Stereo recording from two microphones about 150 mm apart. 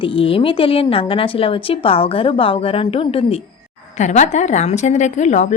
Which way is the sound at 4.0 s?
50° left (ahead or behind).